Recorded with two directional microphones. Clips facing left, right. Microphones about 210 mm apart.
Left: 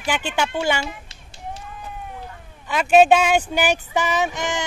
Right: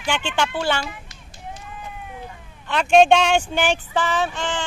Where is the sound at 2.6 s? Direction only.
5° left (ahead or behind).